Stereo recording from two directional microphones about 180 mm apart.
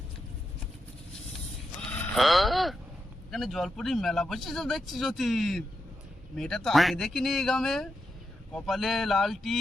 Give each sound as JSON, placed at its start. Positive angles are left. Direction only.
{"t": 1.9, "sound": "speech", "side_deg": 5}